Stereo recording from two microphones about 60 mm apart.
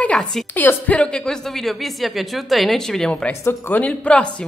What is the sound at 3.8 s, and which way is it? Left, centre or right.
Speech, centre.